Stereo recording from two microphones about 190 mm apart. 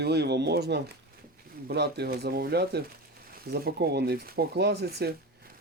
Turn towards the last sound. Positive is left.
turn(degrees=-60)  # may be behind; listen again after turning